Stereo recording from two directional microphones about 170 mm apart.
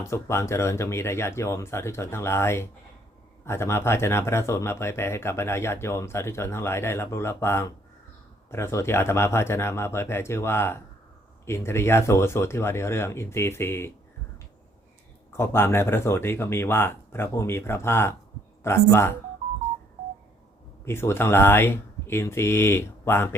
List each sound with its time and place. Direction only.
0.0 s speech: 15° left (ahead or behind)
15.3 s speech: 15° left (ahead or behind)
20.8 s speech: 15° left (ahead or behind)